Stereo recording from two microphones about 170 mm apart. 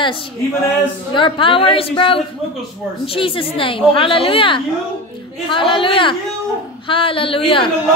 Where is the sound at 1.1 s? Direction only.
30° left (ahead or behind).